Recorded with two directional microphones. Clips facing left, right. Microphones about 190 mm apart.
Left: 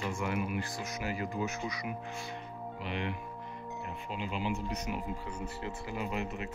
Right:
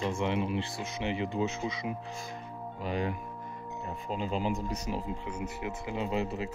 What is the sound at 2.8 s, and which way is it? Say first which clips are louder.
Speech: right 5 dB; 40° right (ahead or behind).